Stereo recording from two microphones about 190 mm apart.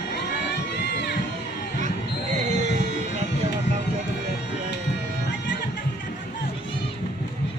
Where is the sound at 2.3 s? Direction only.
40° right (ahead or behind).